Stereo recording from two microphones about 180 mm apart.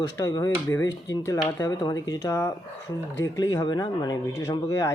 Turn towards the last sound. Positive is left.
turn(degrees=20)  # may be behind; listen again after turning